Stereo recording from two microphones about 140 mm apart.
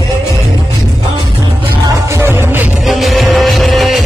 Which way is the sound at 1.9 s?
20° right (ahead or behind).